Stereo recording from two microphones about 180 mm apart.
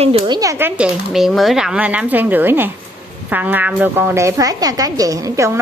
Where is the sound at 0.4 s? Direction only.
15° right (ahead or behind).